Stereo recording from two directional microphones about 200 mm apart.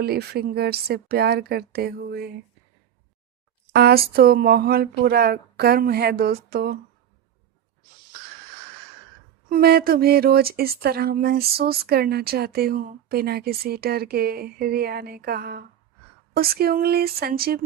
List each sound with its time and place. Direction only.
0.0 s speech: 50° right (ahead or behind)
3.7 s a sound: 50° right (ahead or behind)
4.1 s speech: 50° right (ahead or behind)
9.5 s speech: 50° right (ahead or behind)